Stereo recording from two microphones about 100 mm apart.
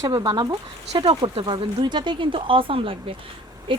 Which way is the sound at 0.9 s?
50° right (ahead or behind).